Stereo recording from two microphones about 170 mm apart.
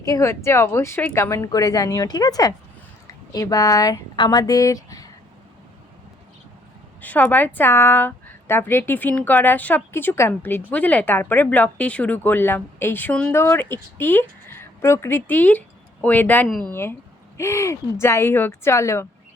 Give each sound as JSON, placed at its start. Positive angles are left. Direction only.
{"t": 0.0, "sound": "a woman's voice", "side_deg": 20}
{"t": 7.0, "sound": "a woman's voice", "side_deg": 10}